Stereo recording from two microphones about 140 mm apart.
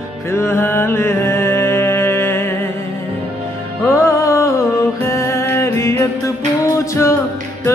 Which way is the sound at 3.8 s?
20° left (ahead or behind).